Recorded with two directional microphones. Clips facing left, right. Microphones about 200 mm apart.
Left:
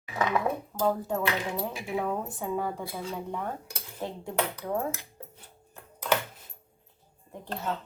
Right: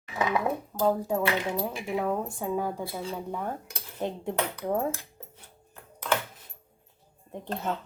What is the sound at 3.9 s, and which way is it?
Speech, 25° right (ahead or behind).